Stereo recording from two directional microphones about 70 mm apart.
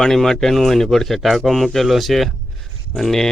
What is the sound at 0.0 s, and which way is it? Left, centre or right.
A man's voice, centre.